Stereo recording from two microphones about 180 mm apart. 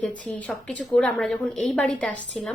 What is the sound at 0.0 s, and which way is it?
A woman's voice, 5° left (ahead or behind).